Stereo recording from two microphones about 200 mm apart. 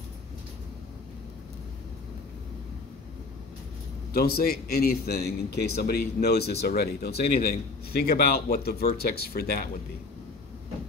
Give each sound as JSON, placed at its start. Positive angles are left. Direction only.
{"t": 4.1, "sound": "a man's voice", "side_deg": 50}